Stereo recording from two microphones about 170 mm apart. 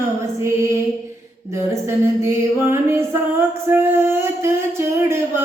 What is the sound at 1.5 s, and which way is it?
Music, 15° right (ahead or behind).